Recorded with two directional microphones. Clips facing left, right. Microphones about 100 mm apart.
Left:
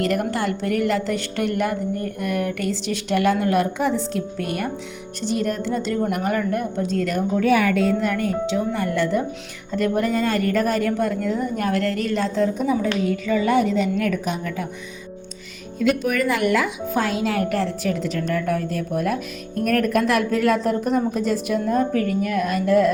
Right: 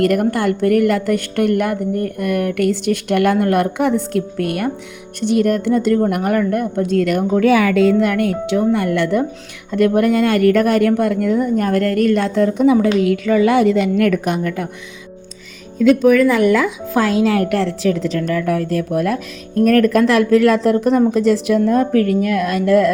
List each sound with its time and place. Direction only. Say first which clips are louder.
0.0 s a woman's voice: right 7 dB; 55° right (ahead or behind)
11.5 s a woman's voice: right 6 dB; 45° right (ahead or behind); by 14.7 s 65° right (ahead or behind)
16.9 s speech: right 8 dB; 90° right